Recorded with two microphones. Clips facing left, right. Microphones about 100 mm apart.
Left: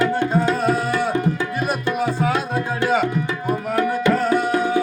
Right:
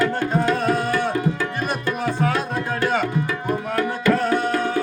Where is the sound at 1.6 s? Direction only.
10° left (ahead or behind).